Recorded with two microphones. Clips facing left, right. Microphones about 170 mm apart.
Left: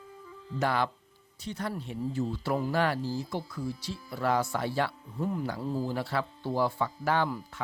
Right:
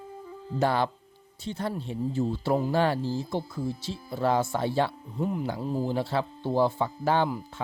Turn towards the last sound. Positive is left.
turn(degrees=-25)  # may be behind; listen again after turning